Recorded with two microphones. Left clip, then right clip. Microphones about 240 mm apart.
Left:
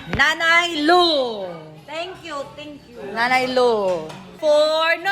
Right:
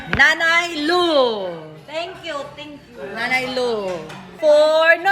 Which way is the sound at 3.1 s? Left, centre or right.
Centre.